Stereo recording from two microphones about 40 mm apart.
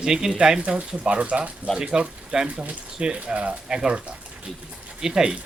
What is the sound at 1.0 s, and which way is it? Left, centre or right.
Speech, right.